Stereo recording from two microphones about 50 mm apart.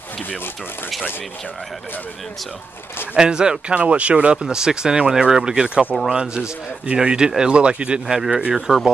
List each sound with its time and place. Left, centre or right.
3.2 s speech: centre
8.1 s speech: centre